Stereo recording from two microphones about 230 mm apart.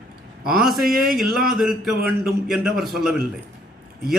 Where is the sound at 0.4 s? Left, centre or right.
Centre.